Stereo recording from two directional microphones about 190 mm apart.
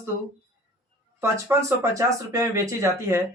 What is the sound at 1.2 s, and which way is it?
Speech, 15° right (ahead or behind).